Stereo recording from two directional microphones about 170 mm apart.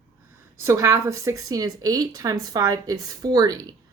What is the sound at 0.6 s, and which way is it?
Speech, 15° right (ahead or behind).